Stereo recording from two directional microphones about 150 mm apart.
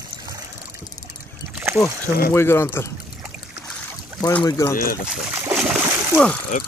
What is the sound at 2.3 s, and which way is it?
Speech, 15° left (ahead or behind).